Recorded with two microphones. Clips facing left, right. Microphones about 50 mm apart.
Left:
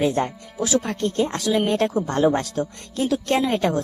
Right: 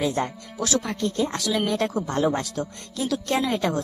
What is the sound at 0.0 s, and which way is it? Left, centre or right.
Speech, left.